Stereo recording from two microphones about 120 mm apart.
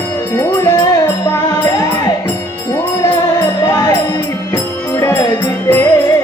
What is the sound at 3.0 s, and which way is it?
Music, 30° left (ahead or behind).